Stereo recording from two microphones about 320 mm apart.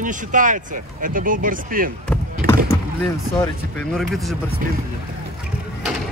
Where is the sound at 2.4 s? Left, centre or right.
Right.